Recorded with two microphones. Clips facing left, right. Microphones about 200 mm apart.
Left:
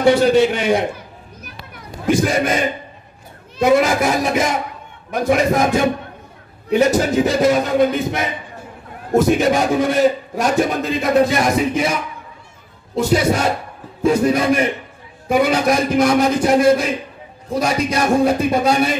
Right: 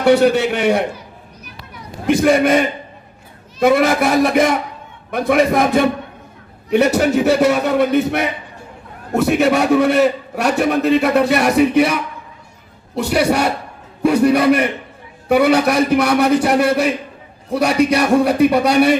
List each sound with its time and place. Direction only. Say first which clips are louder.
0.0 s a man's voice: even; 65° right (ahead or behind)
2.0 s a man's voice: right 4 dB; 60° right (ahead or behind)
3.7 s a man's voice: left 1 dB; 60° right (ahead or behind)
6.7 s a man's voice: right 1 dB; 65° right (ahead or behind)